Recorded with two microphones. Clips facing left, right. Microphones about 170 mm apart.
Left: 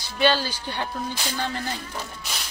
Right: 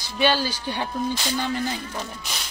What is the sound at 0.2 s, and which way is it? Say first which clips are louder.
Speech: even; 15° right (ahead or behind).